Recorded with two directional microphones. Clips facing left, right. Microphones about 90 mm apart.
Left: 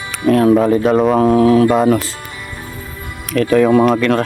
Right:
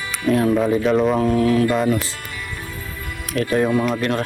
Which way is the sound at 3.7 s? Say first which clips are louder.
Left 8 dB; 45° left (ahead or behind).